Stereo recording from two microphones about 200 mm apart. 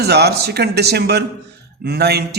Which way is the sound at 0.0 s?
55° right (ahead or behind).